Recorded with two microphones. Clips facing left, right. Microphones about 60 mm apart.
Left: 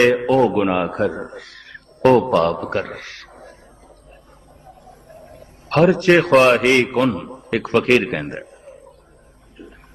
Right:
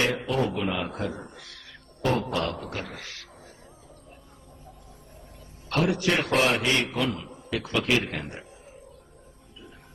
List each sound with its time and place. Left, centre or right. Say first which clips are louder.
0.0 s speech: left 11 dB; left
4.6 s a man's voice: left 10 dB; left